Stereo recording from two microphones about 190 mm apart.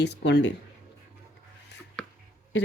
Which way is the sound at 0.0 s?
65° left (ahead or behind).